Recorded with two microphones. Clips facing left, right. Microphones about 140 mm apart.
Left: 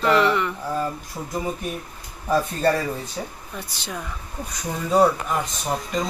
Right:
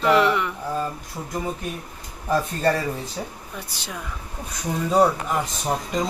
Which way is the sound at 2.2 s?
Centre (ahead or behind).